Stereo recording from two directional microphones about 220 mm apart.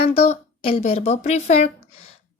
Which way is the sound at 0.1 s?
25° left (ahead or behind).